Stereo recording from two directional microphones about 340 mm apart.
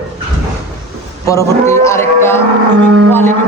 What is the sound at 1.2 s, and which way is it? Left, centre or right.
Speech, centre.